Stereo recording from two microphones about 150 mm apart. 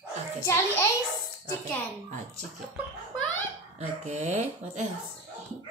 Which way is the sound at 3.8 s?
50° right (ahead or behind).